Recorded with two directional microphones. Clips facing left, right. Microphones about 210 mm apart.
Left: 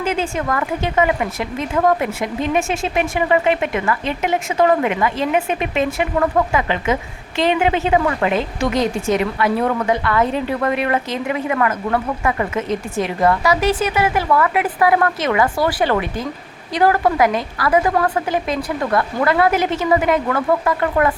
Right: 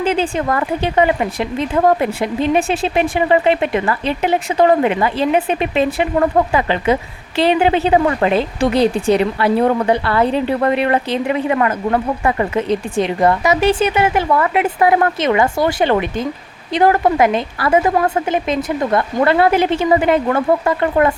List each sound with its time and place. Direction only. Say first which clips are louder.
0.0 s speech: right 4 dB; 30° right (ahead or behind)